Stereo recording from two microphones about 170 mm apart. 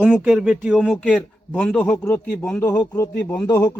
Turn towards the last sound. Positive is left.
turn(degrees=20)  # may be behind; listen again after turning